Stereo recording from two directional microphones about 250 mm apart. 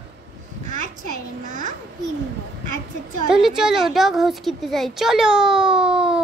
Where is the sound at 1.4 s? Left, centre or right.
Right.